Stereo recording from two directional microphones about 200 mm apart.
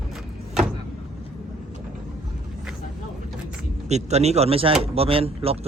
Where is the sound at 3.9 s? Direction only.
35° right (ahead or behind).